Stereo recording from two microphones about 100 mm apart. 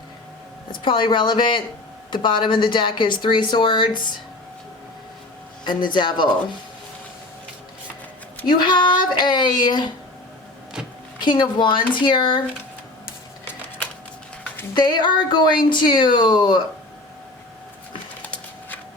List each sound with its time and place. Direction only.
0.7 s a woman's voice: 55° left (ahead or behind)
5.6 s a woman's voice: 50° left (ahead or behind)
8.4 s a woman's voice: 50° left (ahead or behind)
10.8 s a sound: 10° right (ahead or behind)
11.2 s a woman's voice: 50° left (ahead or behind)
14.8 s a woman's voice: 50° left (ahead or behind)